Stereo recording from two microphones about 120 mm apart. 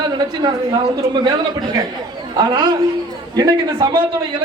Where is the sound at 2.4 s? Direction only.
40° right (ahead or behind).